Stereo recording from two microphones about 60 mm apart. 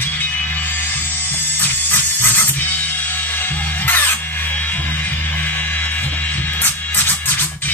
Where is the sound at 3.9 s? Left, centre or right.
Left.